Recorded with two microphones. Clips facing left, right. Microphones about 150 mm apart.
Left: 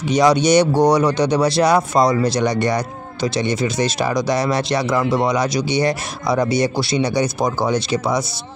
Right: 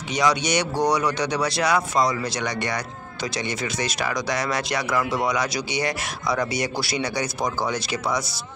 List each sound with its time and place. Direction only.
0.1 s speech: 35° left (ahead or behind)